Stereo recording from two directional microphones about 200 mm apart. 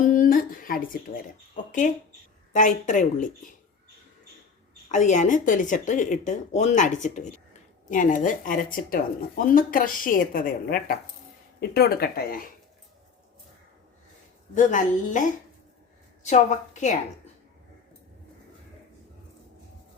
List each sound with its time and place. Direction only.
0.0 s a woman's voice: 45° left (ahead or behind)
2.5 s speech: 40° left (ahead or behind)
4.9 s speech: 35° left (ahead or behind)
14.5 s speech: 40° left (ahead or behind)